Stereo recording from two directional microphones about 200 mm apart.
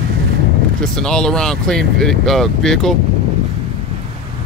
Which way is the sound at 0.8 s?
5° left (ahead or behind).